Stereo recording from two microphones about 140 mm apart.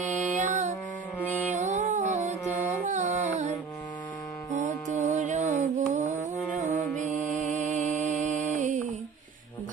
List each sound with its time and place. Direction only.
0.0 s music: 60° right (ahead or behind)
1.2 s music: 10° left (ahead or behind)
1.5 s music: 55° right (ahead or behind)